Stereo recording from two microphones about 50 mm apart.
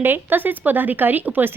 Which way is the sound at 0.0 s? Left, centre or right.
Right.